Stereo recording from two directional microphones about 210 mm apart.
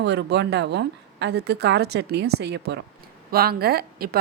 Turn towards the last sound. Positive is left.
turn(degrees=-45)  # may be behind; listen again after turning